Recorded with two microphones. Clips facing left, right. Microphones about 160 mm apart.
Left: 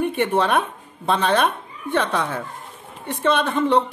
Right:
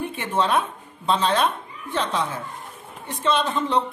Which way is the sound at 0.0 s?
60° left (ahead or behind).